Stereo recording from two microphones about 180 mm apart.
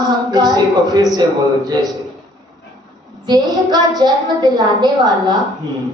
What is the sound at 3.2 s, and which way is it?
A woman's voice, 20° right (ahead or behind).